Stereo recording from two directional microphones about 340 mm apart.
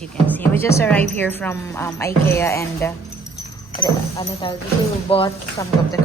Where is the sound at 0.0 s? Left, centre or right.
Centre.